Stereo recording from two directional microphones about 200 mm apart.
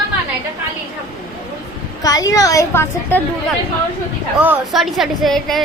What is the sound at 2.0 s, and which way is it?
A woman's voice, 15° left (ahead or behind).